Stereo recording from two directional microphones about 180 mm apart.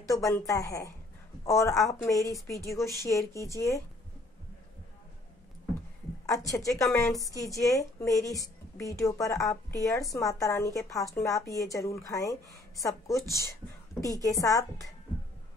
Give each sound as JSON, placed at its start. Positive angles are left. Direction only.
{"t": 0.0, "sound": "a woman's voice", "side_deg": 15}
{"t": 6.2, "sound": "a woman's voice", "side_deg": 20}